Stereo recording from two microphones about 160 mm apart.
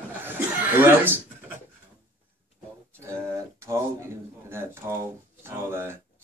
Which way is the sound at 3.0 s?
15° right (ahead or behind).